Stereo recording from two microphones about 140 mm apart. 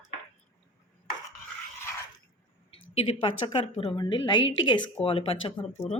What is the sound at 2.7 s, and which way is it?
Speech, 40° left (ahead or behind).